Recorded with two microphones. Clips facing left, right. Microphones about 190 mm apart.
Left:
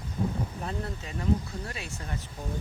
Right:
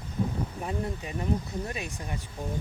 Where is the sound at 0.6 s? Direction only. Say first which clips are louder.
Right 3 dB; 10° right (ahead or behind).